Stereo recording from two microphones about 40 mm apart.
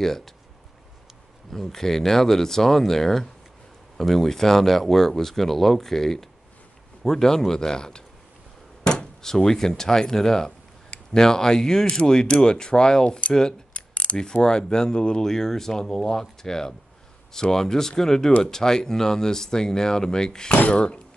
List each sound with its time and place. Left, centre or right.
0.0 s speech: centre
1.5 s speech: centre
13.7 s a sound: left
14.1 s speech: centre
20.5 s speech: left